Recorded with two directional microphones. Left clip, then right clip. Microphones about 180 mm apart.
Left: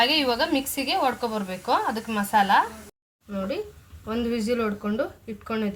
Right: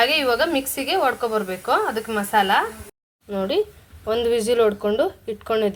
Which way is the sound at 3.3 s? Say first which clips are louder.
Right 8 dB; 45° right (ahead or behind).